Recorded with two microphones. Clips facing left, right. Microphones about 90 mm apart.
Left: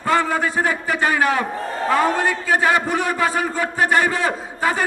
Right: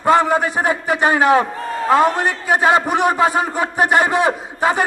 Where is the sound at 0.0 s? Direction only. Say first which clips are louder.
Right 5 dB; 20° right (ahead or behind).